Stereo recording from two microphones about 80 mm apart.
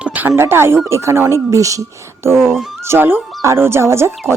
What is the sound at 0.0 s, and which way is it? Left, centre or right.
Speech, right.